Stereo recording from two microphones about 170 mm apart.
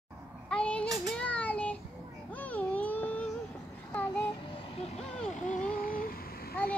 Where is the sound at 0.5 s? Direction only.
5° left (ahead or behind).